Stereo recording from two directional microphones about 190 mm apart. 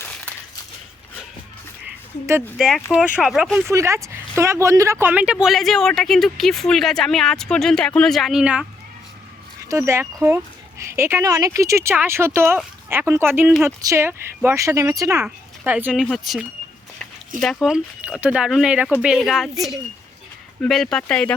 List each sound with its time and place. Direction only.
0.0 s a sound: 10° left (ahead or behind)
2.6 s speech: centre (ahead or behind)
3.7 s speech: 15° right (ahead or behind)
9.6 s speech: 15° right (ahead or behind)
20.6 s speech: centre (ahead or behind)